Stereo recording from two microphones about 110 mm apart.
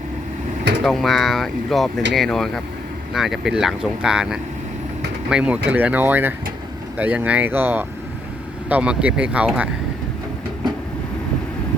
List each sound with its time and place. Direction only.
0.9 s speech: centre (ahead or behind)